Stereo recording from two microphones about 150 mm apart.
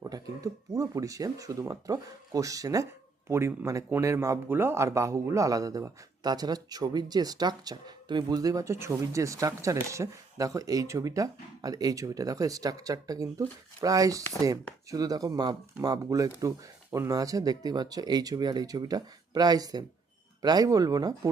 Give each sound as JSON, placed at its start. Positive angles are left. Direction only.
{"t": 0.0, "sound": "speech", "side_deg": -20}